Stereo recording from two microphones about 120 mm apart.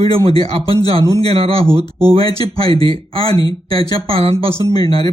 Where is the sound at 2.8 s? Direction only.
50° right (ahead or behind).